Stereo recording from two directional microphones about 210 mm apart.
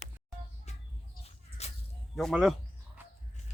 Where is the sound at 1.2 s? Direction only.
30° left (ahead or behind).